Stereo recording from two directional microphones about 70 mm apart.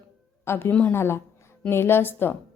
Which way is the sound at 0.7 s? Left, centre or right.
Left.